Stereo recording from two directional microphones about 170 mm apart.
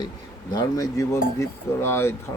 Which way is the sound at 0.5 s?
20° left (ahead or behind).